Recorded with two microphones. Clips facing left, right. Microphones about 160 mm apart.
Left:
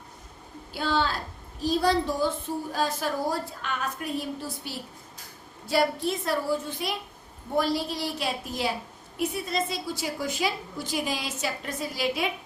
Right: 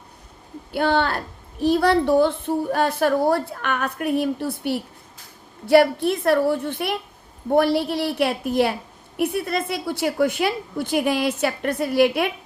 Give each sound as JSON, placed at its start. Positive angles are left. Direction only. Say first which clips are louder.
{"t": 0.7, "sound": "a woman's voice", "louder": "right 6 dB", "side_deg": -60}